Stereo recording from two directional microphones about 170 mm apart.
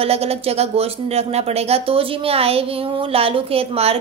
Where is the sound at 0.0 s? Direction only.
35° right (ahead or behind).